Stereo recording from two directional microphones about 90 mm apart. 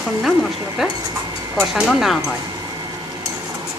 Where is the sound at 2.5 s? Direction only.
45° right (ahead or behind).